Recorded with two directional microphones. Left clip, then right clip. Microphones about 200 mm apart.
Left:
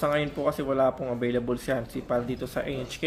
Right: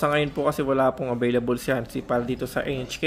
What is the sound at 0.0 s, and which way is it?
Speech, 30° right (ahead or behind).